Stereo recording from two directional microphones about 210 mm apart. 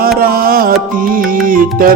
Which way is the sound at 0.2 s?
45° right (ahead or behind).